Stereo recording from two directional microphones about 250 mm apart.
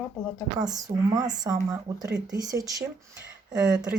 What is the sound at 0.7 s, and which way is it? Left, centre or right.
Speech, centre.